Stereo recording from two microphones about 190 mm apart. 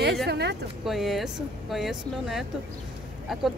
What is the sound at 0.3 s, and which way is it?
Speech, 60° right (ahead or behind).